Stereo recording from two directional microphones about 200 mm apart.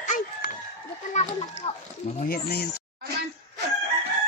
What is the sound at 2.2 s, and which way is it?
Speech, 50° left (ahead or behind).